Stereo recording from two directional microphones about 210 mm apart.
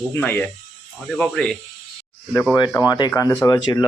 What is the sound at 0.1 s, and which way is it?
Speech, 10° left (ahead or behind).